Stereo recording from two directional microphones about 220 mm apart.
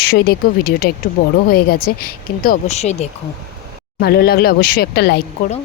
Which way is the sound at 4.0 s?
45° left (ahead or behind).